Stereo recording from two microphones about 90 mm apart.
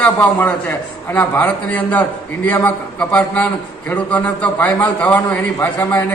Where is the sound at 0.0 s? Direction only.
15° left (ahead or behind).